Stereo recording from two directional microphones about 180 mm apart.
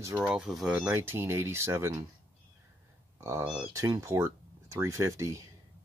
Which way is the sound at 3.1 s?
15° right (ahead or behind).